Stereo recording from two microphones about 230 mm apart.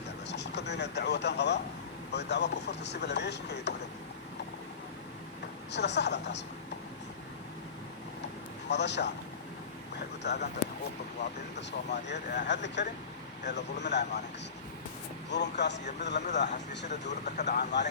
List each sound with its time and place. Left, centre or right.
0.3 s speech: left
5.7 s speech: left
8.7 s speech: left
10.2 s speech: left
15.3 s speech: left
17.1 s speech: left
17.6 s speech: left